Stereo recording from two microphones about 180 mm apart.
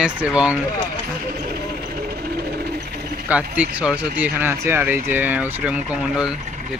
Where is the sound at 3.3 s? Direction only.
5° right (ahead or behind).